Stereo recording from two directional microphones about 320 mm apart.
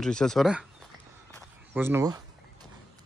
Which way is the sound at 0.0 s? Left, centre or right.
Centre.